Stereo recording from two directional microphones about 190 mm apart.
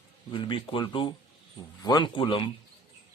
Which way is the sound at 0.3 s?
25° left (ahead or behind).